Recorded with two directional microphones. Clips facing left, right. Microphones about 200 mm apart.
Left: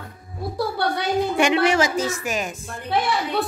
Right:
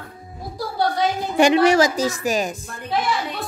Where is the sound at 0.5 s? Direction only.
65° left (ahead or behind).